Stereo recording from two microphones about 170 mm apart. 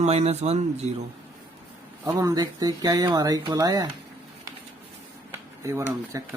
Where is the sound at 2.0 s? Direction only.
20° right (ahead or behind).